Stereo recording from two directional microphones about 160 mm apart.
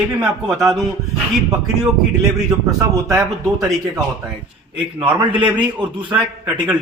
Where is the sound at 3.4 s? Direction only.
Centre (ahead or behind).